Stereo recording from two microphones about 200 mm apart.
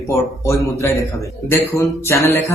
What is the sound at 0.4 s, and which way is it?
Speech, 15° left (ahead or behind).